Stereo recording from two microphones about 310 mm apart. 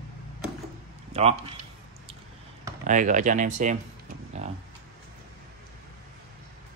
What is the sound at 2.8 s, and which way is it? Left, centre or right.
Speech, right.